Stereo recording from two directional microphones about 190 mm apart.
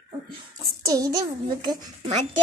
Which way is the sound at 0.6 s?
20° right (ahead or behind).